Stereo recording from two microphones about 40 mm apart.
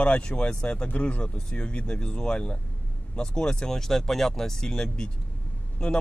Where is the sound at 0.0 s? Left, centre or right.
Left.